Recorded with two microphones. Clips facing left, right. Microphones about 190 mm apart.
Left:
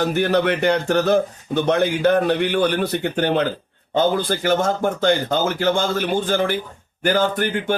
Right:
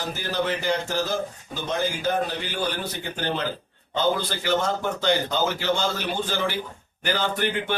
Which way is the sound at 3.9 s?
50° left (ahead or behind).